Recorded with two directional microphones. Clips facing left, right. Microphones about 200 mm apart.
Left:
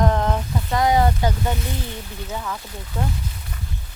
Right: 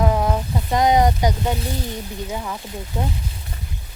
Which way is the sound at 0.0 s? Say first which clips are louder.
Right 1 dB; 10° right (ahead or behind).